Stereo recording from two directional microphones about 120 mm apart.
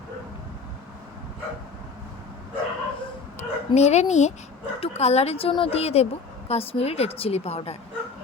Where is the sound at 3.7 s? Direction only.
65° left (ahead or behind).